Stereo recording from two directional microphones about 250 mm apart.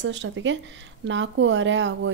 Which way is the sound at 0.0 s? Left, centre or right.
Right.